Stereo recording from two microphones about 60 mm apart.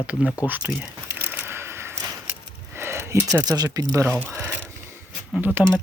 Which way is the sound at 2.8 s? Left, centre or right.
Right.